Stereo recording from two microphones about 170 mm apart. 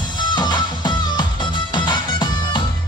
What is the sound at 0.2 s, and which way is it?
Music, 25° left (ahead or behind).